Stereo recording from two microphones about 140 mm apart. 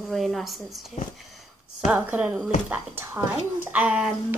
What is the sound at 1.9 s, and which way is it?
Speech, 10° right (ahead or behind).